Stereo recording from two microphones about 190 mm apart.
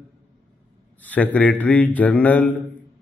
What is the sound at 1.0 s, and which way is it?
A man's voice, 10° left (ahead or behind).